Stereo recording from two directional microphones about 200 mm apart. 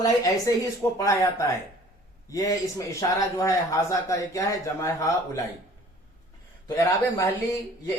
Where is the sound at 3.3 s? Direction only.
15° left (ahead or behind).